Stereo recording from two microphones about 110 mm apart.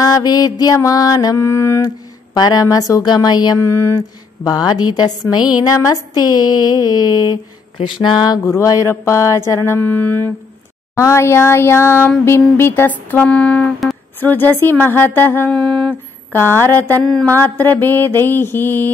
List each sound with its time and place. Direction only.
0.0 s mantra: 35° left (ahead or behind)
2.3 s mantra: 35° left (ahead or behind)
3.5 s mantra: 25° left (ahead or behind)
4.5 s mantra: 35° left (ahead or behind)
7.7 s a sound: 50° left (ahead or behind)
8.5 s mantra: 25° left (ahead or behind)
13.1 s speech: 10° left (ahead or behind)
16.3 s mantra: 20° left (ahead or behind)
17.0 s a sound: 5° left (ahead or behind)
17.3 s mantra: 15° left (ahead or behind)